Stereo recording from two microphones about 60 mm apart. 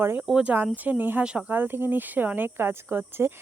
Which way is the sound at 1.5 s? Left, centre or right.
Right.